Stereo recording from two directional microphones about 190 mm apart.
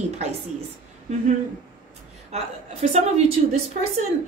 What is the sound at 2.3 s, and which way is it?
A woman's voice, 35° right (ahead or behind).